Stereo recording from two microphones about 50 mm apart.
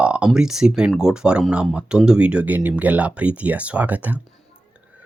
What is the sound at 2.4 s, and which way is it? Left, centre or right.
Speech, right.